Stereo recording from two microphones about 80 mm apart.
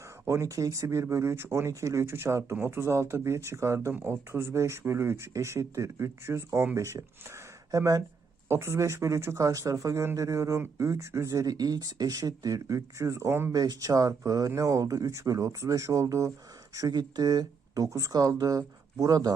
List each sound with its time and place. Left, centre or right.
0.3 s speech: right
8.4 s speech: right
13.5 s speech: right
16.7 s speech: right
18.1 s speech: right